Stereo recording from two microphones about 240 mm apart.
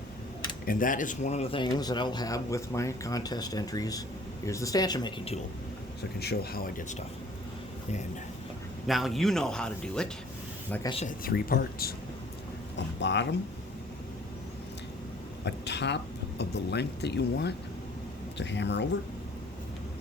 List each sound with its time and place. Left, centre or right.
0.6 s speech: left
6.1 s speech: left
8.9 s speech: centre
10.8 s speech: left
11.2 s speech: left
15.4 s speech: left